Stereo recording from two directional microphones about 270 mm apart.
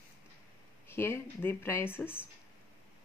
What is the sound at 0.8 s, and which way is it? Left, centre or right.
A woman's voice, centre.